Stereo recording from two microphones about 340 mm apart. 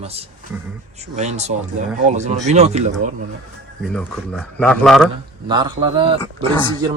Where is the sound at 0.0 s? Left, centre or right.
Centre.